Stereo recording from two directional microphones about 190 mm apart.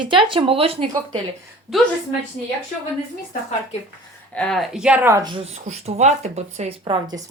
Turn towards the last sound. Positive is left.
turn(degrees=-25)  # may be behind; listen again after turning